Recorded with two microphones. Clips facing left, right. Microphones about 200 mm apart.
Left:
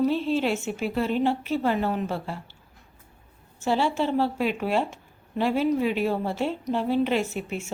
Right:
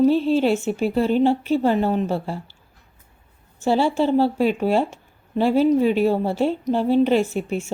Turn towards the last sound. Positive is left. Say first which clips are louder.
# right 6 dB
turn(degrees=-30)  # may be behind; listen again after turning